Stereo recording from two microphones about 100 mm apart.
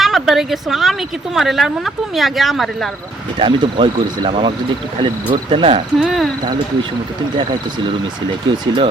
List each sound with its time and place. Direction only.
0.0 s speech: centre (ahead or behind)
3.3 s speech: 55° right (ahead or behind)
6.0 s speech: centre (ahead or behind)
7.3 s speech: 50° right (ahead or behind)